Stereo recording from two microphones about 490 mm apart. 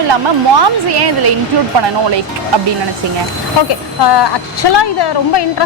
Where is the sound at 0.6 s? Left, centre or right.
Right.